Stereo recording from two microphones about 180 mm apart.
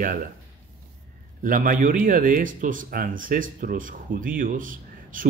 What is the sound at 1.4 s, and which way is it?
Speech, 50° right (ahead or behind).